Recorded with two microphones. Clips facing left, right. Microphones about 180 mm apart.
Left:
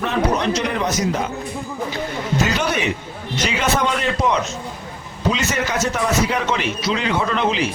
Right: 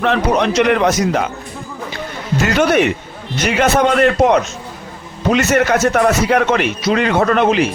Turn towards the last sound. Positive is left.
turn(degrees=-55)  # may be behind; listen again after turning